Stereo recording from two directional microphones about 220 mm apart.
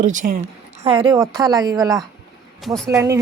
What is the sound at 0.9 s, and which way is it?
A woman's voice, 20° right (ahead or behind).